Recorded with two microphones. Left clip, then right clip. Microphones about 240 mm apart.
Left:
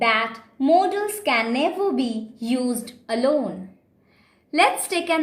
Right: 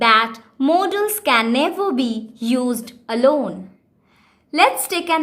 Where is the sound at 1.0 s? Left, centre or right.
Right.